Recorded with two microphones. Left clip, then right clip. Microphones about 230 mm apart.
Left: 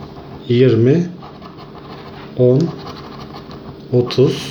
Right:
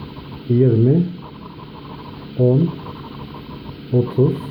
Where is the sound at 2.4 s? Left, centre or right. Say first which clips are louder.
Left 5 dB; left.